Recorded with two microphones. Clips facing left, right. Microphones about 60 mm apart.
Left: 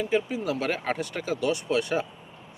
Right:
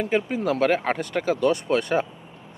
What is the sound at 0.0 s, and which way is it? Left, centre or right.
Speech, right.